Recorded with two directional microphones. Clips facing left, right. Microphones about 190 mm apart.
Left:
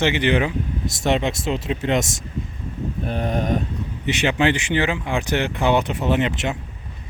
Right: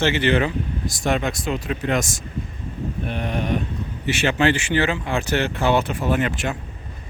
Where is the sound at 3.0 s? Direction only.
40° left (ahead or behind).